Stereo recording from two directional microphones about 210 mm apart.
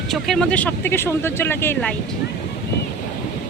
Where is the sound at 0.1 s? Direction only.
Centre (ahead or behind).